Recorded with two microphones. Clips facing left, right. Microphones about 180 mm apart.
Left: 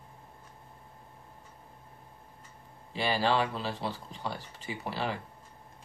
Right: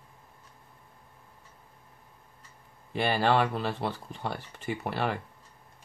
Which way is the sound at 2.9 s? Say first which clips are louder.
Right 3 dB; 55° right (ahead or behind).